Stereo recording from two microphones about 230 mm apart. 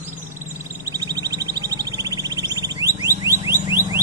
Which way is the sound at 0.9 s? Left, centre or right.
Centre.